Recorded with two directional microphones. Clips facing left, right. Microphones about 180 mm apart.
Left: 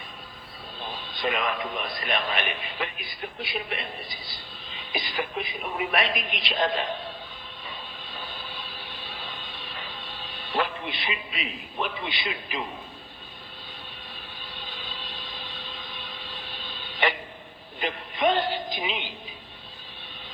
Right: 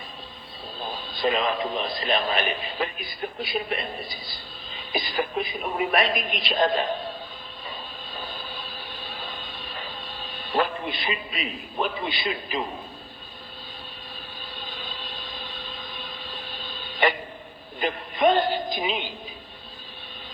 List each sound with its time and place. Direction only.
0.8 s a man's voice: 40° right (ahead or behind)
7.7 s vehicle: 40° right (ahead or behind)
14.5 s a sound: 45° right (ahead or behind)
17.7 s music: 45° right (ahead or behind)